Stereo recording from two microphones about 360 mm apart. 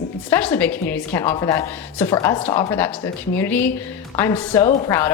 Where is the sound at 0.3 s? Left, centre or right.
Centre.